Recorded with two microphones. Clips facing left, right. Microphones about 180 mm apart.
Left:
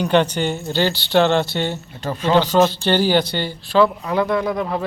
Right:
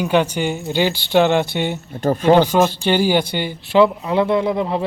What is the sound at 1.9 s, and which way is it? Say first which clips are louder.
Speech: right 7 dB; 50° right (ahead or behind).